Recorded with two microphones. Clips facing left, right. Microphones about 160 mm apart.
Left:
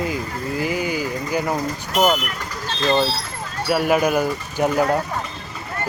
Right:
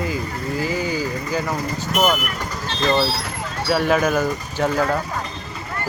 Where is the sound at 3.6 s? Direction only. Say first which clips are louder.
Even; 10° left (ahead or behind).